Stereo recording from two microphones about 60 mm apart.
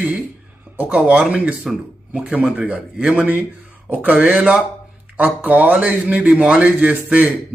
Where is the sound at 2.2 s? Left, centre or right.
Centre.